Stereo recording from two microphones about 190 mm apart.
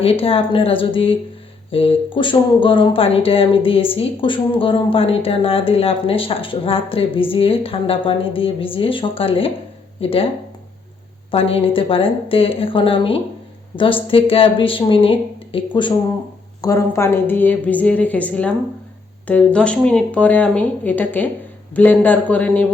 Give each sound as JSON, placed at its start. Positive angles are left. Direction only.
{"t": 0.0, "sound": "speech", "side_deg": 30}
{"t": 11.3, "sound": "a woman's voice", "side_deg": 30}